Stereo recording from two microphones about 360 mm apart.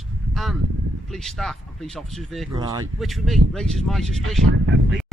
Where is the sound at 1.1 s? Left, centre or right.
Centre.